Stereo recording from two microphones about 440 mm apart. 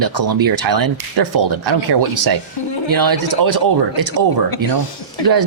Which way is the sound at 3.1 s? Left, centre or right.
Right.